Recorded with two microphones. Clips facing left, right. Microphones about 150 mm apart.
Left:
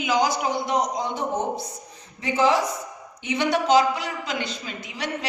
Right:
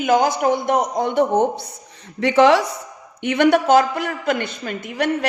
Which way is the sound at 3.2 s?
60° right (ahead or behind).